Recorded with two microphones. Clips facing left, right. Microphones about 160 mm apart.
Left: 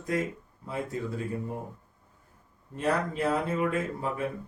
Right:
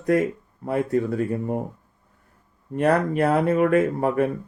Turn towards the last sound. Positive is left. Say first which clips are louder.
# right 11 dB
turn(degrees=-60)  # may be behind; listen again after turning